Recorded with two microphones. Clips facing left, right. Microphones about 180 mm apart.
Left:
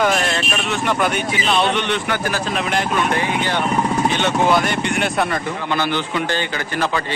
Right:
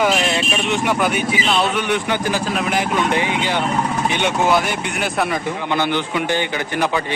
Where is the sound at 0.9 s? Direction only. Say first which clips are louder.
Right 1 dB; 5° right (ahead or behind).